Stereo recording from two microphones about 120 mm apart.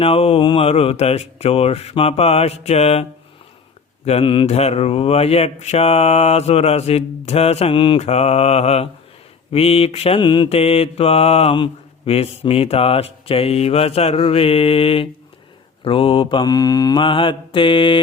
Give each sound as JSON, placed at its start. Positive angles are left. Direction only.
{"t": 0.0, "sound": "mantra", "side_deg": 55}
{"t": 4.4, "sound": "mantra", "side_deg": 60}
{"t": 8.0, "sound": "mantra", "side_deg": 60}
{"t": 17.0, "sound": "mantra", "side_deg": 45}